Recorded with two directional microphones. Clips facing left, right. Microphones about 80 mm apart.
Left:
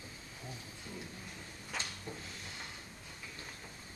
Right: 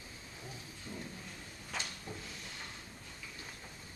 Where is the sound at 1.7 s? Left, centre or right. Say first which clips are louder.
Even; centre.